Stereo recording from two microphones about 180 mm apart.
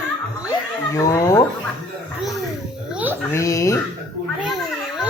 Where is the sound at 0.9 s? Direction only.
15° left (ahead or behind).